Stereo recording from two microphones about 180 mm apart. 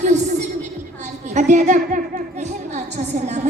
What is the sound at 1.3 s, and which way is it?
Speech, 40° right (ahead or behind).